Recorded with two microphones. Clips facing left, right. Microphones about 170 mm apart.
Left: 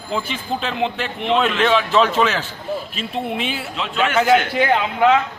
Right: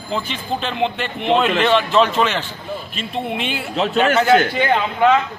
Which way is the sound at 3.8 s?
45° right (ahead or behind).